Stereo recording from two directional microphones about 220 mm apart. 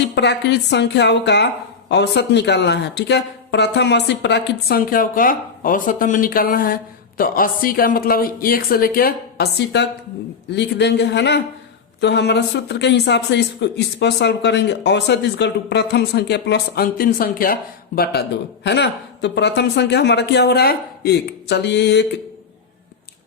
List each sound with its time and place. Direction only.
0.2 s a woman's voice: 50° left (ahead or behind)